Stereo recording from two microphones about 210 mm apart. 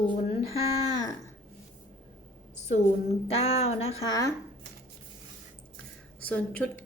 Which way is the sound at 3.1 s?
30° left (ahead or behind).